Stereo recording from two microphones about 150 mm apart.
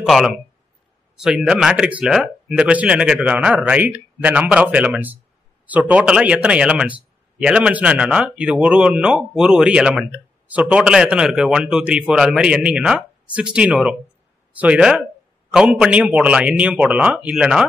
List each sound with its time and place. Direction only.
0.0 s a man's voice: centre (ahead or behind)